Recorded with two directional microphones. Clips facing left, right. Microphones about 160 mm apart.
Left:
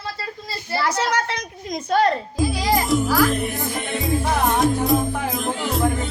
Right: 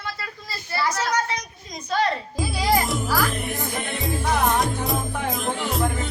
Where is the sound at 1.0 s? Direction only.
65° left (ahead or behind); by 2.2 s 50° left (ahead or behind).